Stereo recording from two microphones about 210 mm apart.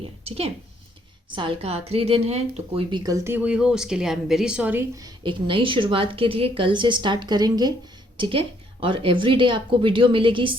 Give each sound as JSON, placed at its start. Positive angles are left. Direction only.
{"t": 0.0, "sound": "a woman's voice", "side_deg": -30}